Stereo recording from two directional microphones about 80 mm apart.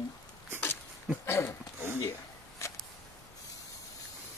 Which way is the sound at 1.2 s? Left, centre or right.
Left.